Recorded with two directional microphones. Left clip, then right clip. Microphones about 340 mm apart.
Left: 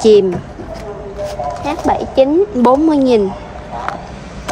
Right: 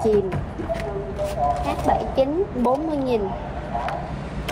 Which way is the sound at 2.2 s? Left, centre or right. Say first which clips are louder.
Left 10 dB; left.